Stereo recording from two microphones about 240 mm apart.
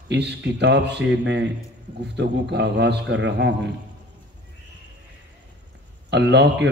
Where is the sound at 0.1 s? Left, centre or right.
Right.